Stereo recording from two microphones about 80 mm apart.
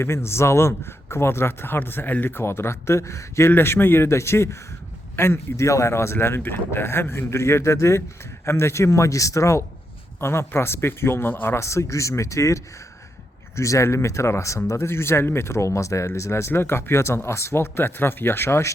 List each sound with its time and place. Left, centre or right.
0.0 s speech: left